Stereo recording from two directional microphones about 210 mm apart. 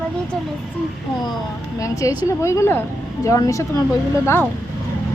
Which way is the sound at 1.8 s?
15° left (ahead or behind).